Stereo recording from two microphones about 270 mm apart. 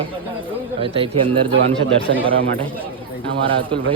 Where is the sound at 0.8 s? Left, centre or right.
Centre.